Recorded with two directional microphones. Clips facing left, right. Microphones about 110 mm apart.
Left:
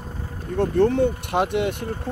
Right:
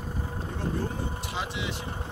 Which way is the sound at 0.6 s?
70° left (ahead or behind).